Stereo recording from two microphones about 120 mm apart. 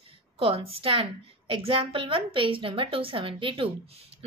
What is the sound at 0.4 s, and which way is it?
A woman's voice, 50° right (ahead or behind).